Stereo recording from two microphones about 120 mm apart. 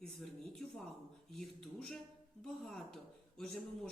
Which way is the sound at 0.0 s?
5° left (ahead or behind).